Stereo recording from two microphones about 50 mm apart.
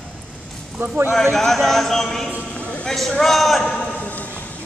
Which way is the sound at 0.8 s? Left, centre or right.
Right.